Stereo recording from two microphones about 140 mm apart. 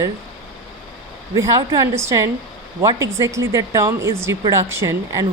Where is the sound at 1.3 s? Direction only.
20° right (ahead or behind).